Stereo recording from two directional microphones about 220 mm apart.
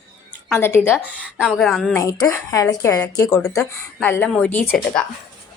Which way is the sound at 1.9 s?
15° left (ahead or behind).